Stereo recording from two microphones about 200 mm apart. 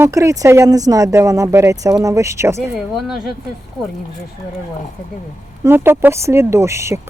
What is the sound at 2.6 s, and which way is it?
Speech, 5° right (ahead or behind).